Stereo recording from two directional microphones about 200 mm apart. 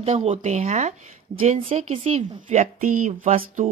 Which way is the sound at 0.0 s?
35° right (ahead or behind).